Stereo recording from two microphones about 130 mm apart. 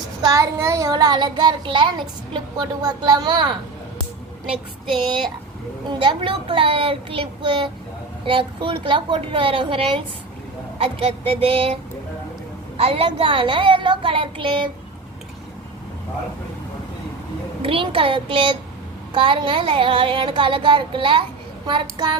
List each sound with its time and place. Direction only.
0.2 s a child's voice: 25° right (ahead or behind)
5.9 s a child's voice: 40° right (ahead or behind)
17.6 s a woman's voice: 45° right (ahead or behind)